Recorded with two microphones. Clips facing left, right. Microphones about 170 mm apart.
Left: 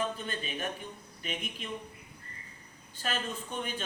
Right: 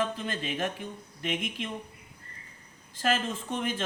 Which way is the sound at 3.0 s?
90° right.